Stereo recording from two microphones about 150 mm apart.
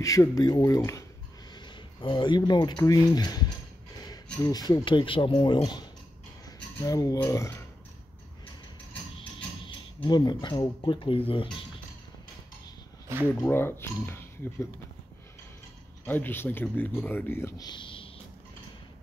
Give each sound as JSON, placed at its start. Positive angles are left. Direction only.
{"t": 0.0, "sound": "speech", "side_deg": 20}
{"t": 10.0, "sound": "speech", "side_deg": 30}
{"t": 13.3, "sound": "speech", "side_deg": 15}
{"t": 16.1, "sound": "speech", "side_deg": 15}